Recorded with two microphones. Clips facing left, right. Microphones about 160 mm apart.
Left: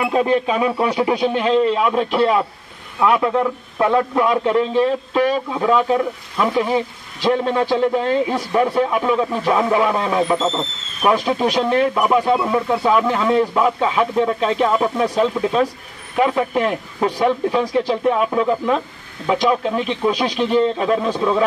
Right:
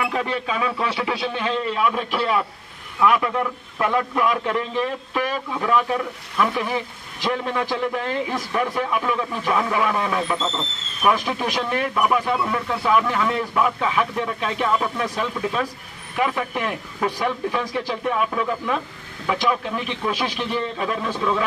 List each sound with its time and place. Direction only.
0.0 s speech: 25° left (ahead or behind)